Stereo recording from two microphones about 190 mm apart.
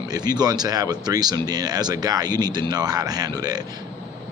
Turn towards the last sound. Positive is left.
turn(degrees=-20)  # may be behind; listen again after turning